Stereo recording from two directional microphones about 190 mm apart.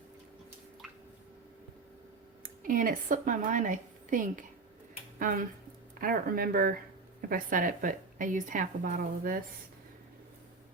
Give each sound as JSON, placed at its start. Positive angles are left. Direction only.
{"t": 2.4, "sound": "a woman's voice", "side_deg": -45}
{"t": 6.0, "sound": "a woman's voice", "side_deg": -50}